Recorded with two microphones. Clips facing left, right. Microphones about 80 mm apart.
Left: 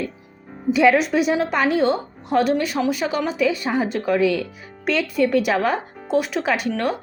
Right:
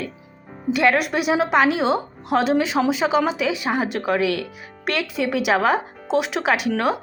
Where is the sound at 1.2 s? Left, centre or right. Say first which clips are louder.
Right 2 dB; right.